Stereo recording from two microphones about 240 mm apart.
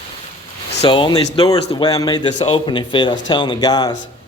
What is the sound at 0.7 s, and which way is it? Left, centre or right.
Speech, left.